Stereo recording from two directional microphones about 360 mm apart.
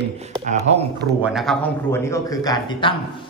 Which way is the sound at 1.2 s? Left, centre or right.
Centre.